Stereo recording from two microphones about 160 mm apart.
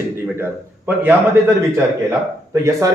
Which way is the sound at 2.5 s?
20° right (ahead or behind).